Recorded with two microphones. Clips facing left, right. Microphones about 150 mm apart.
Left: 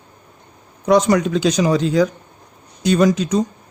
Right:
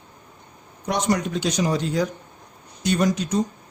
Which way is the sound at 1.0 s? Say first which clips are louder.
Left 7 dB; 90° left.